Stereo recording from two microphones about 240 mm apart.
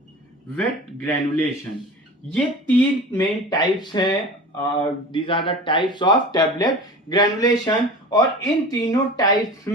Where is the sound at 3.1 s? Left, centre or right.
Centre.